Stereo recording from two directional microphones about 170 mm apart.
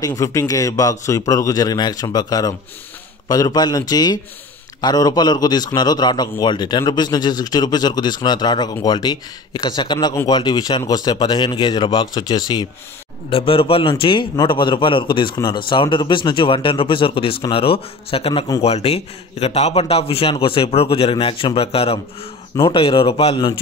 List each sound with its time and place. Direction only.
0.0 s a man's voice: 20° left (ahead or behind)